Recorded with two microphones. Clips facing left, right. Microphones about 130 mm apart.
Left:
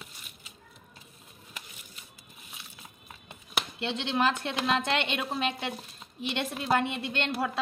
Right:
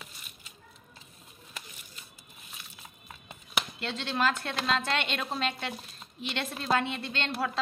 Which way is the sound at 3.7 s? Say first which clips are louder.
Left 4 dB; 20° left (ahead or behind).